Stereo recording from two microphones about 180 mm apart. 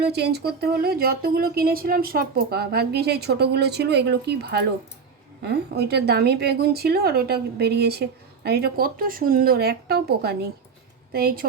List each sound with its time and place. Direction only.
0.0 s speech: 65° right (ahead or behind)